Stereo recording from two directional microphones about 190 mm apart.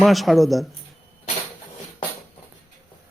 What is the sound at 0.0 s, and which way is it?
Speech, centre (ahead or behind).